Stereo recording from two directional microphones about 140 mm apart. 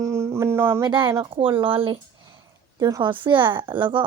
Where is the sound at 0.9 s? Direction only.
30° right (ahead or behind).